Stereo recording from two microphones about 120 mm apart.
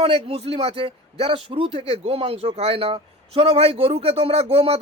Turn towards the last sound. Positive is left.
turn(degrees=-55)  # may be behind; listen again after turning